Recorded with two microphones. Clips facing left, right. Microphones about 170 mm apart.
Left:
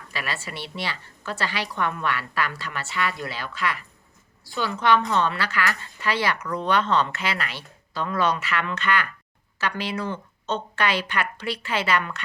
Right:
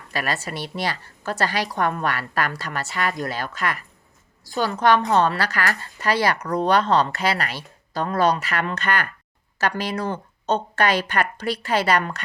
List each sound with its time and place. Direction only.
0.1 s a woman's voice: 45° right (ahead or behind)